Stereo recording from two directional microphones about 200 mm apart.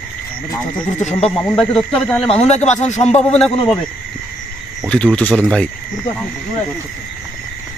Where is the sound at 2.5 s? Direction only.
35° left (ahead or behind).